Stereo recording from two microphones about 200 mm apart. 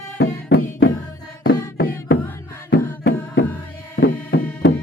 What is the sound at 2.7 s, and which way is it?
Music, 60° left (ahead or behind).